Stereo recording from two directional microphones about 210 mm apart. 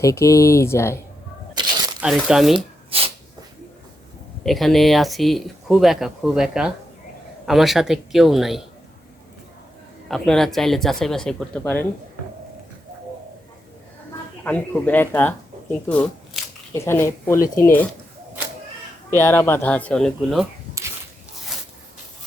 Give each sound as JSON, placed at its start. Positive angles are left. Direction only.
{"t": 0.0, "sound": "speech", "side_deg": 15}
{"t": 1.6, "sound": "crumpling", "side_deg": -20}
{"t": 2.0, "sound": "speech", "side_deg": 0}
{"t": 2.9, "sound": "sneeze", "side_deg": -25}
{"t": 4.4, "sound": "speech", "side_deg": 0}
{"t": 10.1, "sound": "speech", "side_deg": 0}
{"t": 14.4, "sound": "speech", "side_deg": 5}
{"t": 19.1, "sound": "speech", "side_deg": 10}